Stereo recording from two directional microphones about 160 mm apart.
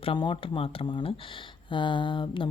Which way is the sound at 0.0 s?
30° left (ahead or behind).